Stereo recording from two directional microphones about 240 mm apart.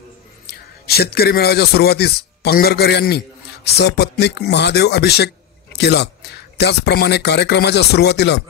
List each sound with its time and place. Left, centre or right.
0.5 s a man's voice: left